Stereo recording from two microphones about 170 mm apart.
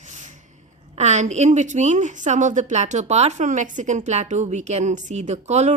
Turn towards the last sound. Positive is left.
turn(degrees=-40)  # may be behind; listen again after turning